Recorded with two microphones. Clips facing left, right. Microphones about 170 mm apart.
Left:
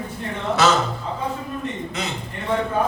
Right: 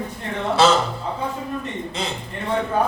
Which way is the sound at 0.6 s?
30° right (ahead or behind).